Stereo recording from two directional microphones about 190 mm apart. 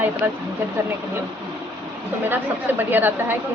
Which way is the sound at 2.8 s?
10° right (ahead or behind).